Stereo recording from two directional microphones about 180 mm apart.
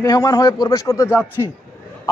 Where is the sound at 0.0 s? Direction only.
20° left (ahead or behind).